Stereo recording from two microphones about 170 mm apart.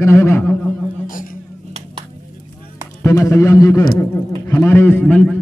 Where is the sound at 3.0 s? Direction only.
15° left (ahead or behind).